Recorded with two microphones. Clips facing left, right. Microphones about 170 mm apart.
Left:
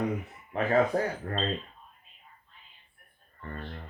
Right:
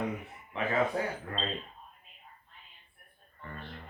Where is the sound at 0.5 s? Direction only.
40° left (ahead or behind).